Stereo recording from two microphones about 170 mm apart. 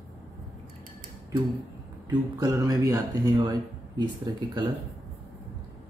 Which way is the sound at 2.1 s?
20° right (ahead or behind).